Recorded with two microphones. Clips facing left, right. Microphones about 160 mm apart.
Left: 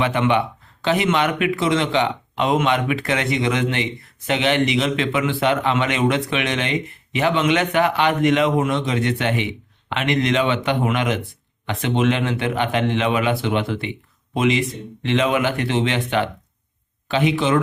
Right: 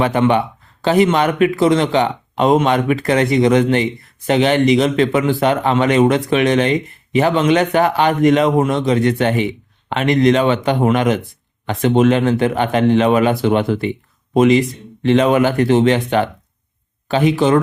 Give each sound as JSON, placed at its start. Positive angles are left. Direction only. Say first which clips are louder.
{"t": 0.0, "sound": "a man's voice", "louder": "right 4 dB", "side_deg": -40}